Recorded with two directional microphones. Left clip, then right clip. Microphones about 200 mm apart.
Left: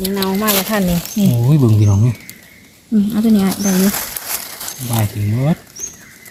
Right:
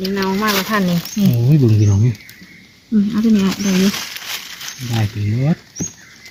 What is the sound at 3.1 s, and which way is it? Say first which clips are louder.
Speech: left 1 dB; 25° right (ahead or behind).